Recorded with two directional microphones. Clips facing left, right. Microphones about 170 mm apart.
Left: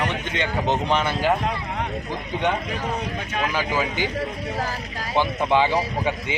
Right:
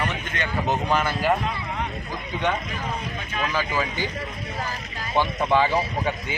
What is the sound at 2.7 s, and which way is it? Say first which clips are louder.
Speech: left 3 dB; 70° left (ahead or behind).